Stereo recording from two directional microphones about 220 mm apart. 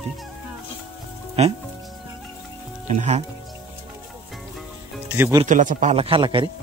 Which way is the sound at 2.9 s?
30° right (ahead or behind).